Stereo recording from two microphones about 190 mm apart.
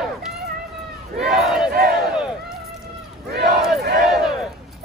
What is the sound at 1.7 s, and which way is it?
Battle cry, 55° right (ahead or behind).